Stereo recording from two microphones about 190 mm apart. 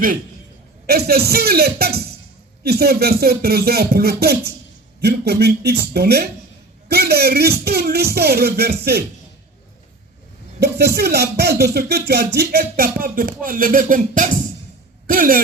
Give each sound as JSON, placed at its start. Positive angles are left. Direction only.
{"t": 0.9, "sound": "speech", "side_deg": -55}
{"t": 10.6, "sound": "speech", "side_deg": -60}